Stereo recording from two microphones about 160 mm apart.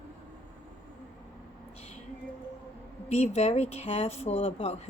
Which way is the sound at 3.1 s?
45° left (ahead or behind).